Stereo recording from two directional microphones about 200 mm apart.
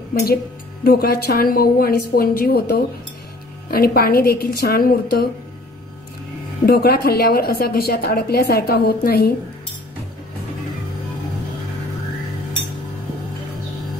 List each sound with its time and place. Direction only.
0.1 s a woman's voice: 50° left (ahead or behind)
6.6 s a woman's voice: 50° left (ahead or behind)